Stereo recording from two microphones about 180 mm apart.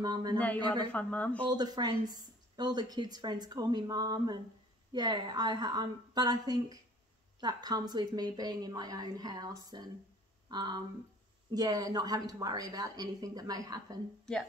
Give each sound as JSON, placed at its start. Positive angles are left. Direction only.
{"t": 0.0, "sound": "speech", "side_deg": -20}
{"t": 0.9, "sound": "speech", "side_deg": 10}
{"t": 1.4, "sound": "speech", "side_deg": -25}